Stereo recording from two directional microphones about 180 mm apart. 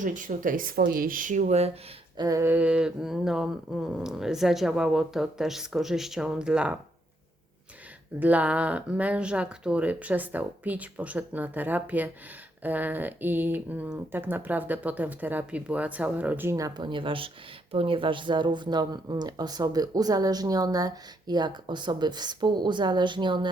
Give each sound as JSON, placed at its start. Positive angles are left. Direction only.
{"t": 0.0, "sound": "speech", "side_deg": -45}
{"t": 2.1, "sound": "a sound", "side_deg": -20}
{"t": 8.2, "sound": "speech", "side_deg": -10}